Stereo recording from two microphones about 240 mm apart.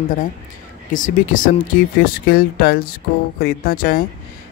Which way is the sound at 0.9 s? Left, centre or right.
Left.